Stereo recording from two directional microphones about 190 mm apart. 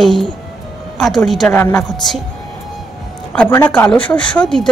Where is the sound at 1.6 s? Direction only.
20° left (ahead or behind).